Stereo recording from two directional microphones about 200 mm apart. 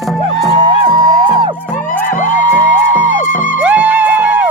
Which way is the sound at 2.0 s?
40° left (ahead or behind).